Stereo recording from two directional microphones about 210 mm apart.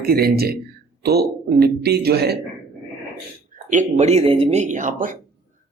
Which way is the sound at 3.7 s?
30° right (ahead or behind).